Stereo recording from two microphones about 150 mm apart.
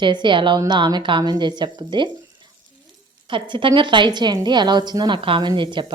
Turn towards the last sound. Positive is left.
turn(degrees=-30)  # may be behind; listen again after turning